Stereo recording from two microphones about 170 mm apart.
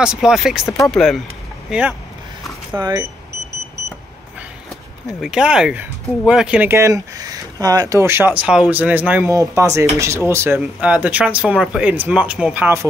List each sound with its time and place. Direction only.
0.0 s speech: 5° right (ahead or behind)
0.7 s speech: 20° left (ahead or behind)
1.7 s speech: 5° right (ahead or behind)
2.8 s speech: 20° right (ahead or behind)
5.2 s speech: 5° right (ahead or behind)